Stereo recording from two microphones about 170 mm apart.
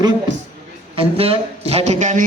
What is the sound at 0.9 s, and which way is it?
Speech, 35° right (ahead or behind).